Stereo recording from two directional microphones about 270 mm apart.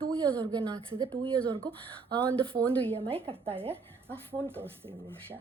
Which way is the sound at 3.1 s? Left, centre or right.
Centre.